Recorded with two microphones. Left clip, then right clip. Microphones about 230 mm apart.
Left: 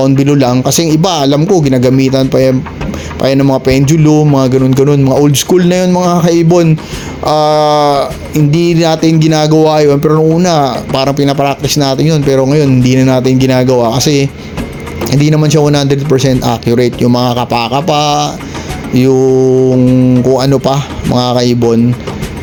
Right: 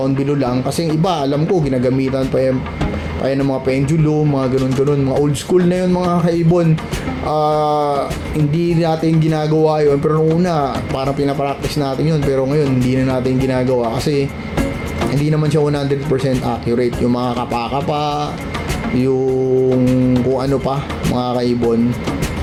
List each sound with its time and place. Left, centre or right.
0.0 s speech: left